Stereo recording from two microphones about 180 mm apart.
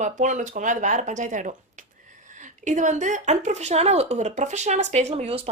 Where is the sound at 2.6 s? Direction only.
45° right (ahead or behind).